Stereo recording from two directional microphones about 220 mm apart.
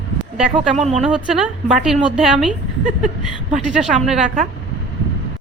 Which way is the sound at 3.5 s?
Centre (ahead or behind).